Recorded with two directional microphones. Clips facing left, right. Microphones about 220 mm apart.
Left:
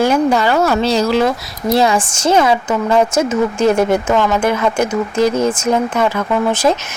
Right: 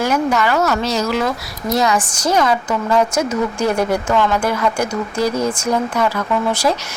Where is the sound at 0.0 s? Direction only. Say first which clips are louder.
Left 4 dB; 30° left (ahead or behind).